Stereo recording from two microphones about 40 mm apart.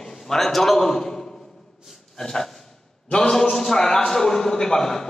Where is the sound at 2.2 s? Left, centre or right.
Centre.